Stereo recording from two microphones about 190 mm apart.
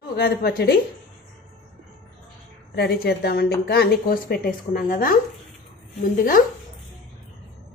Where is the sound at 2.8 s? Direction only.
60° left (ahead or behind).